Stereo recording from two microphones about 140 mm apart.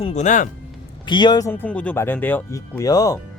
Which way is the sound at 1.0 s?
35° left (ahead or behind).